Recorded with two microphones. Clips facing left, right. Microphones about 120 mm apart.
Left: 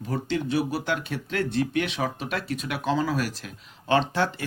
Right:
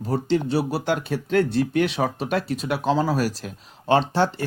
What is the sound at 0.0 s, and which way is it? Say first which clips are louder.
Speech: right 5 dB; 35° right (ahead or behind).